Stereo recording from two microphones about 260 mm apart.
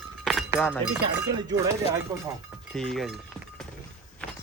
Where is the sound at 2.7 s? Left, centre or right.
Centre.